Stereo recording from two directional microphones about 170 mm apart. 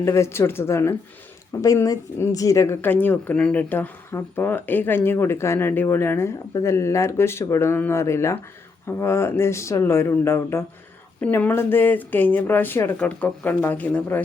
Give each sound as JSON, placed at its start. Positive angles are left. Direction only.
{"t": 0.0, "sound": "speech", "side_deg": 15}